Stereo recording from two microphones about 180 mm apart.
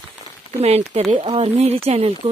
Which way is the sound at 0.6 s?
35° right (ahead or behind).